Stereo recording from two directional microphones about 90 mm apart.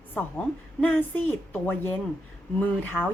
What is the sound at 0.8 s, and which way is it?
A woman's voice, 20° left (ahead or behind).